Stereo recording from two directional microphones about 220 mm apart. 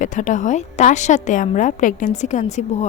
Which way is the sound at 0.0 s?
35° left (ahead or behind).